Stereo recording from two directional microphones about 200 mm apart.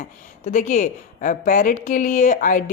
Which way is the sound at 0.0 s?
35° left (ahead or behind).